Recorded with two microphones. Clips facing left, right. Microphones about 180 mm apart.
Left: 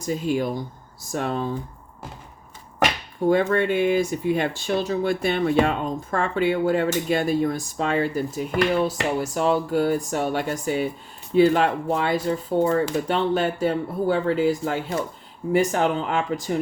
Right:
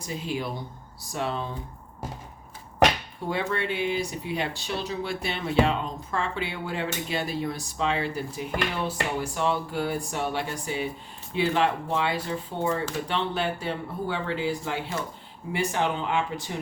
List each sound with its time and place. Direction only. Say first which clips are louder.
0.0 s speech: left 8 dB; 45° left (ahead or behind)
3.2 s speech: left 9 dB; 45° left (ahead or behind)